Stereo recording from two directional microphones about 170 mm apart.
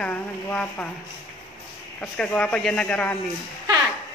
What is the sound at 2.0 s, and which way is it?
Speech, 5° left (ahead or behind).